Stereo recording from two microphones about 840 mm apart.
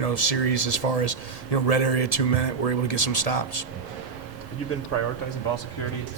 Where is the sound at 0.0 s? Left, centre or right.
Left.